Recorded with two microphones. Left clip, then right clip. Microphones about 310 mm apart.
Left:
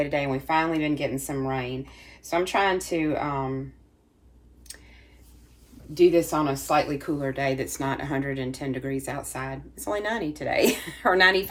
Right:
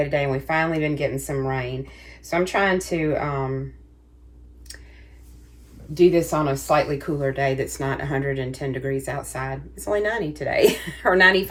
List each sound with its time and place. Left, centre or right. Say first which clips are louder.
0.0 s speech: right 3 dB; centre
5.9 s speech: right 2 dB; centre